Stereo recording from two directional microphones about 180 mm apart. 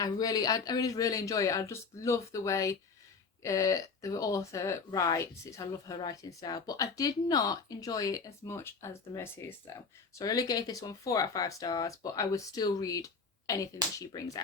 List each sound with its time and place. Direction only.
0.0 s speech: 20° left (ahead or behind)